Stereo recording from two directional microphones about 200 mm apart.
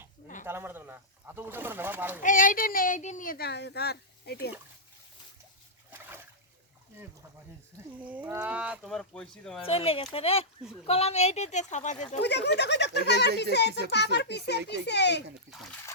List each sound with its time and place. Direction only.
0.4 s speech: 10° right (ahead or behind)
2.2 s speech: 40° left (ahead or behind)
8.0 s speech: 10° right (ahead or behind)
9.6 s speech: 30° left (ahead or behind)
12.2 s a child's voice: 60° left (ahead or behind)
15.4 s speech: centre (ahead or behind)